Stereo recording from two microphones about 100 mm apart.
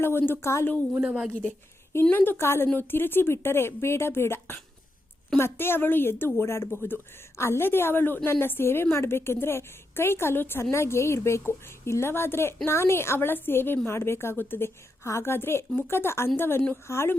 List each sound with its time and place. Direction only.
0.0 s speech: 20° left (ahead or behind)
1.0 s a woman's voice: 10° right (ahead or behind)
2.0 s speech: 20° left (ahead or behind)